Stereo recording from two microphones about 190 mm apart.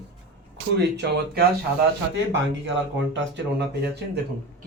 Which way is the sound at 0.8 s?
60° right (ahead or behind).